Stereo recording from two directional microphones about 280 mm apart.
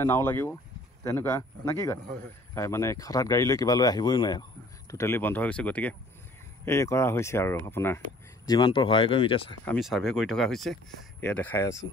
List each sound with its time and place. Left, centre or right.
0.0 s speech: centre
9.7 s speech: centre